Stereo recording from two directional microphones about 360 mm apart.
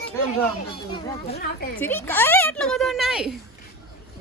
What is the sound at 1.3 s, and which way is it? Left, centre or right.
Speech, left.